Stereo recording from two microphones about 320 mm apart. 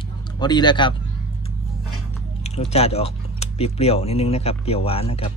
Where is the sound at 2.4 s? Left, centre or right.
Centre.